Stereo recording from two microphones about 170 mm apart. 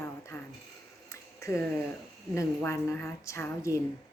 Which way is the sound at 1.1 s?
15° left (ahead or behind).